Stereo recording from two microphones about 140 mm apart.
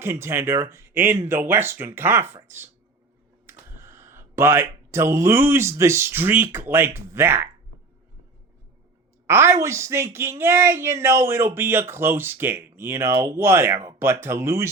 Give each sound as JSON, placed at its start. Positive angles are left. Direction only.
{"t": 0.0, "sound": "speech", "side_deg": -15}
{"t": 9.2, "sound": "speech", "side_deg": -15}